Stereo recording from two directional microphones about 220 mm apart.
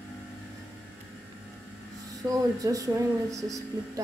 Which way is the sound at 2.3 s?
15° right (ahead or behind).